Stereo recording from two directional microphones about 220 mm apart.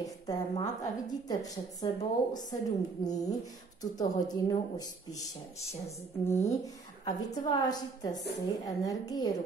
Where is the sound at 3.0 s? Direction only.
15° left (ahead or behind).